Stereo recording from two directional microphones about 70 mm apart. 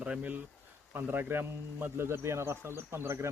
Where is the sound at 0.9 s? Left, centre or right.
Right.